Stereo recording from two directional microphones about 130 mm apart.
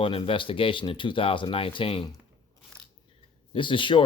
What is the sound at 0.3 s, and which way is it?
Speech, 40° left (ahead or behind).